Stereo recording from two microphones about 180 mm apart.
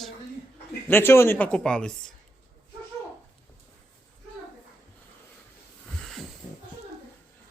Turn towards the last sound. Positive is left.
turn(degrees=0)  # may be behind; listen again after turning